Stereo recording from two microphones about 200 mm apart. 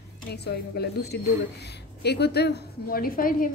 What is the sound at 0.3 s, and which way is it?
A woman's voice, 55° left (ahead or behind).